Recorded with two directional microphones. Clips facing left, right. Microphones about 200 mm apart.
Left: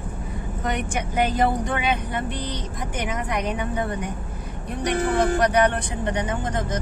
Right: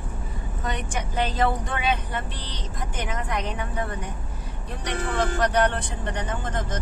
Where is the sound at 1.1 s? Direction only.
15° left (ahead or behind).